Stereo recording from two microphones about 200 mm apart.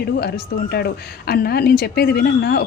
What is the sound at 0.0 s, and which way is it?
Speech, 50° left (ahead or behind).